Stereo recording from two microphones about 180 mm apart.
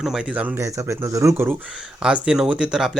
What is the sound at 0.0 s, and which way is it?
Speech, 5° right (ahead or behind).